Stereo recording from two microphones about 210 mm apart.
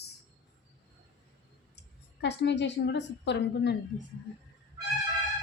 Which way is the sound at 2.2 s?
55° left (ahead or behind).